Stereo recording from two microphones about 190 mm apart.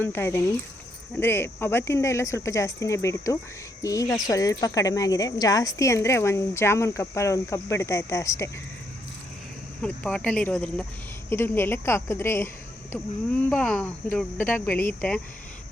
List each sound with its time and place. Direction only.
0.0 s speech: 10° left (ahead or behind)
9.8 s speech: 5° left (ahead or behind)